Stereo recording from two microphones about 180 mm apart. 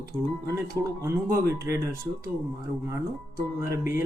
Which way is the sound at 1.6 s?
15° right (ahead or behind).